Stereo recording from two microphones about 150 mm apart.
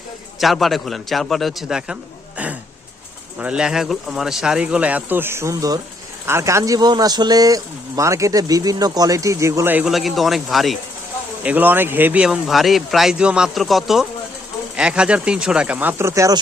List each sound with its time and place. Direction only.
0.3 s a man's voice: centre (ahead or behind)
9.9 s speech: centre (ahead or behind)
11.4 s speech: 10° right (ahead or behind)